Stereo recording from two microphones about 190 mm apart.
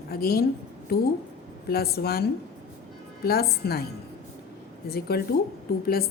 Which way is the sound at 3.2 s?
55° left (ahead or behind).